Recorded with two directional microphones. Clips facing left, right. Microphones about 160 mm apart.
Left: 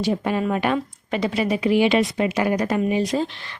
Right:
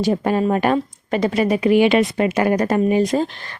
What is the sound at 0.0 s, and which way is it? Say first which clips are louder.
Speech: right 4 dB; 45° right (ahead or behind).